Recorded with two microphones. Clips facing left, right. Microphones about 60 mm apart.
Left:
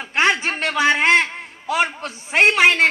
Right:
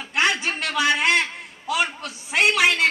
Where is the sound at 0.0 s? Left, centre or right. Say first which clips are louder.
Left 4 dB; left.